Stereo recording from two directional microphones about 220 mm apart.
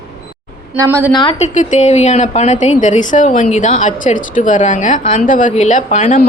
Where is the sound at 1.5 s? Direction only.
30° left (ahead or behind).